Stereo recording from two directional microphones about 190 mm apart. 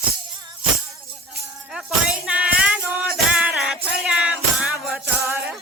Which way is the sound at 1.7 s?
5° right (ahead or behind).